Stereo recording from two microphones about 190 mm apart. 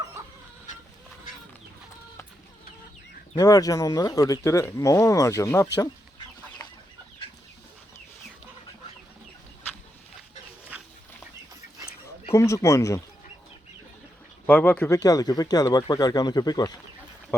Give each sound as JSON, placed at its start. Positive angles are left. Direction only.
{"t": 3.3, "sound": "speech", "side_deg": 20}
{"t": 10.7, "sound": "dog", "side_deg": -5}
{"t": 12.3, "sound": "speech", "side_deg": 15}
{"t": 14.4, "sound": "speech", "side_deg": 10}